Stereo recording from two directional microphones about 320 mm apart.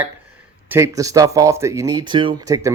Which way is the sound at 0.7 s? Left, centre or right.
Centre.